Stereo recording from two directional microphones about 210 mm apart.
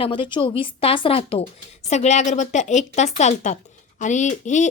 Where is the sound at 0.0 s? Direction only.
25° left (ahead or behind).